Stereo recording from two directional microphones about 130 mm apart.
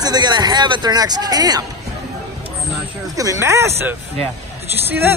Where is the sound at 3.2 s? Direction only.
25° right (ahead or behind).